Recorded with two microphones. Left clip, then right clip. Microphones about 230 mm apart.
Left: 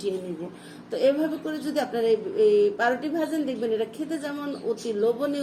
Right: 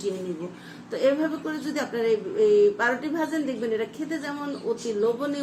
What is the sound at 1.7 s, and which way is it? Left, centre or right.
A woman's voice, centre.